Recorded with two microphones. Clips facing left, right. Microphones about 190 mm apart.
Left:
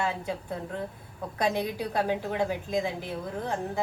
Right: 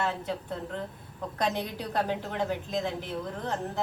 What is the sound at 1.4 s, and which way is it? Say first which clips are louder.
A woman's voice: left 3 dB; 5° left (ahead or behind).